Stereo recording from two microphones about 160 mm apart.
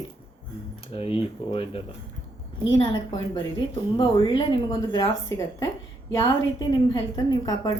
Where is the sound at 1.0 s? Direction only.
35° left (ahead or behind).